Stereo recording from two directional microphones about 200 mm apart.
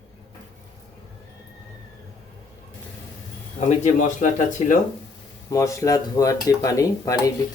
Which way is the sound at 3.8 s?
40° left (ahead or behind).